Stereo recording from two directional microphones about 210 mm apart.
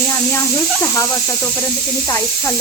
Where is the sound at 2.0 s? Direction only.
15° left (ahead or behind).